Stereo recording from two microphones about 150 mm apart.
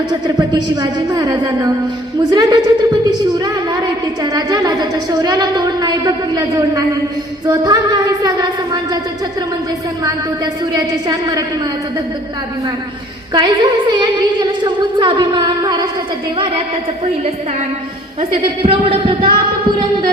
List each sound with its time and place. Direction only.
0.1 s a woman's voice: 30° right (ahead or behind)
7.4 s a sound: 25° right (ahead or behind)
10.0 s a woman's voice: 25° right (ahead or behind)
13.3 s a woman's voice: 30° right (ahead or behind)
18.6 s speech: 35° right (ahead or behind)